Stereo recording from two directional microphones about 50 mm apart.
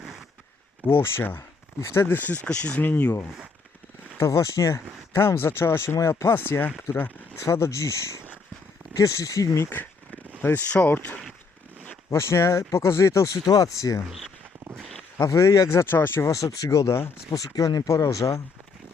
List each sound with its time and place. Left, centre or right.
0.0 s a sound: centre
0.9 s speech: left
1.4 s speech: left
2.0 s speech: left
2.4 s speech: left
4.2 s speech: left
5.1 s speech: left
6.9 s speech: left
10.4 s speech: left
12.1 s speech: left
15.4 s speech: left
15.9 s speech: left